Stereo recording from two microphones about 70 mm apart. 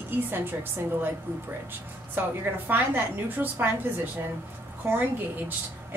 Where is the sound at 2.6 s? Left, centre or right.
Right.